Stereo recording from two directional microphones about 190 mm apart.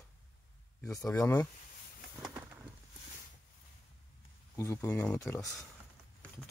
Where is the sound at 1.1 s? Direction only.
15° left (ahead or behind).